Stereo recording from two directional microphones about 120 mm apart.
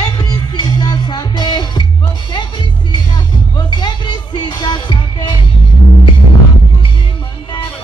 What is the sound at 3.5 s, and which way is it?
Music, 40° left (ahead or behind).